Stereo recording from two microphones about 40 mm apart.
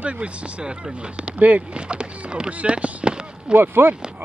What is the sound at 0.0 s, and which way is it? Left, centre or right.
Speech, right.